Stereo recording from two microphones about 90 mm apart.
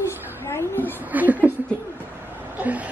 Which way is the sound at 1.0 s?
20° right (ahead or behind).